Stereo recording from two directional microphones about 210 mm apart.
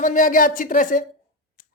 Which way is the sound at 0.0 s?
40° left (ahead or behind).